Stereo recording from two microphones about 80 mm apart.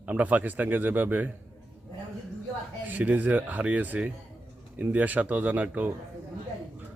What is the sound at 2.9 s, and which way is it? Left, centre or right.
Speech, centre.